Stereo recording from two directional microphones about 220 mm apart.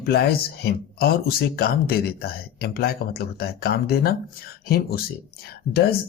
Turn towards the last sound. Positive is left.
turn(degrees=45)  # may be behind; listen again after turning